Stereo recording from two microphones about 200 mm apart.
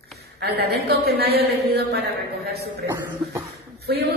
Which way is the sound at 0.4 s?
55° right (ahead or behind).